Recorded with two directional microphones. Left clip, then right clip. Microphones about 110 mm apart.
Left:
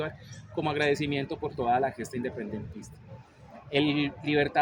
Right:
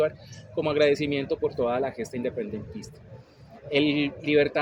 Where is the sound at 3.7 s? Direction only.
40° left (ahead or behind).